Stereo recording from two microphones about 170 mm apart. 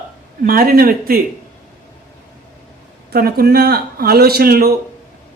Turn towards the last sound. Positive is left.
turn(degrees=-65)  # may be behind; listen again after turning